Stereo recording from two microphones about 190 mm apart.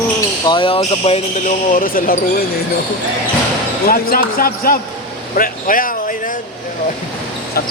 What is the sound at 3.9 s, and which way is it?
Speech, 50° left (ahead or behind).